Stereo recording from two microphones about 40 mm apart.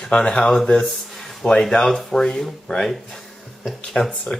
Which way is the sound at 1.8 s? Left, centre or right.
Centre.